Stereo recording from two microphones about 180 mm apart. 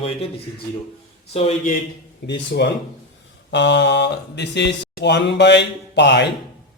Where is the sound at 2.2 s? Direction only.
75° left (ahead or behind).